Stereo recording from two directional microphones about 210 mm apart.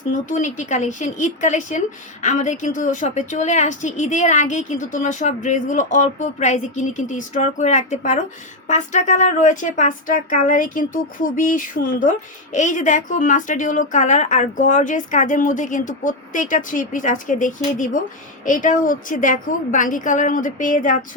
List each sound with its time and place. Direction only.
0.1 s a woman's voice: 35° left (ahead or behind)